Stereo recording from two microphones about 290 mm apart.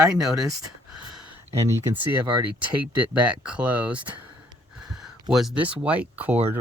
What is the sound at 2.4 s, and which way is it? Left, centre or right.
Speech, right.